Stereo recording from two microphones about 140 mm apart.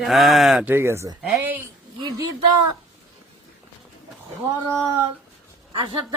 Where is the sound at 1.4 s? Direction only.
15° right (ahead or behind).